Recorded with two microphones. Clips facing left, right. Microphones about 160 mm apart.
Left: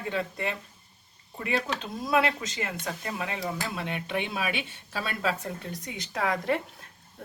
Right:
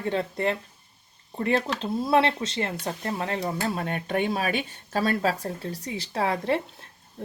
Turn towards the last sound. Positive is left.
turn(degrees=-30)  # may be behind; listen again after turning